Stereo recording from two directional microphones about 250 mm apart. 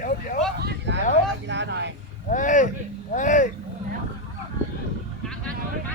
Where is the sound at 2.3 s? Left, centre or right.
Left.